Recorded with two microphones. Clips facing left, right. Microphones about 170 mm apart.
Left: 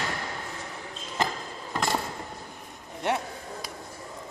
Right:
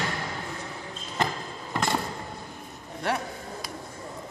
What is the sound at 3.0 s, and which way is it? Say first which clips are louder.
Speech: left 1 dB; 20° left (ahead or behind).